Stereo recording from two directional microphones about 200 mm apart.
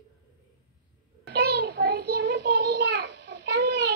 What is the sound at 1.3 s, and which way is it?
Child singing, 50° right (ahead or behind).